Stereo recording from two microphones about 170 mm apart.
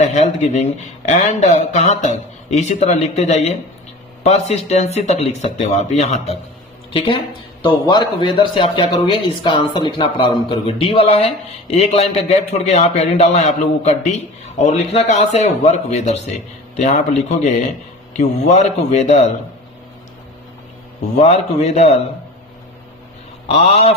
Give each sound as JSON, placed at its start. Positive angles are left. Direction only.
{"t": 0.0, "sound": "a man's voice", "side_deg": 40}
{"t": 6.9, "sound": "a man's voice", "side_deg": 30}
{"t": 21.2, "sound": "a man's voice", "side_deg": 40}
{"t": 23.5, "sound": "a man's voice", "side_deg": 35}